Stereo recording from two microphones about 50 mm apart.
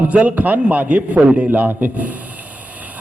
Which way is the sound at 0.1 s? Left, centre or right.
Right.